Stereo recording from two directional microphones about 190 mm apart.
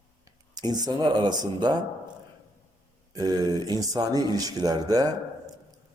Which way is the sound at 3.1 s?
20° right (ahead or behind).